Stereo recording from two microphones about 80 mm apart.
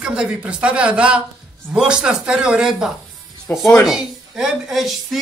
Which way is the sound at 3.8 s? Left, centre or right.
Centre.